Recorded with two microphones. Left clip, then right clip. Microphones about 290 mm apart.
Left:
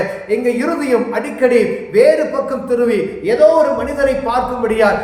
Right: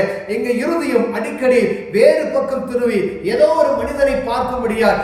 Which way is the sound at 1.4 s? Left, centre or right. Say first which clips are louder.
Left 2 dB; centre.